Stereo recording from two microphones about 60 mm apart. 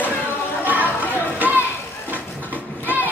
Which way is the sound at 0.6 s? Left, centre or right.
Right.